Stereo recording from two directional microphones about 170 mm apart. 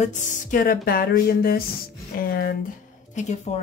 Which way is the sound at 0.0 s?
50° left (ahead or behind).